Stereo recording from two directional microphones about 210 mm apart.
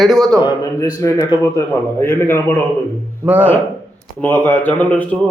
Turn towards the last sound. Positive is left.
turn(degrees=5)  # may be behind; listen again after turning